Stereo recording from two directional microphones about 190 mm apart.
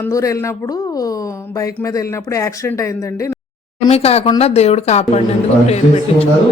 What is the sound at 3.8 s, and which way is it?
Speech, 30° left (ahead or behind).